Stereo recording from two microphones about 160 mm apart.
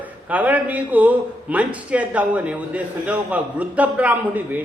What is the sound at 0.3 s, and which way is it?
A man's voice, 10° right (ahead or behind).